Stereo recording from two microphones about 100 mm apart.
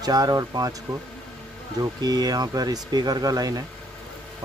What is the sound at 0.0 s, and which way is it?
Speech, 40° right (ahead or behind).